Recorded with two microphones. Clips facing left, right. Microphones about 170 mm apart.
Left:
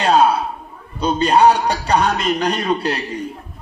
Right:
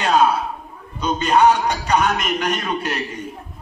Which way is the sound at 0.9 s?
35° left (ahead or behind).